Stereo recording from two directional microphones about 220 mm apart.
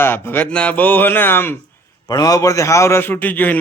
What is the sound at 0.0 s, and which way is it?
A man's voice, 10° left (ahead or behind).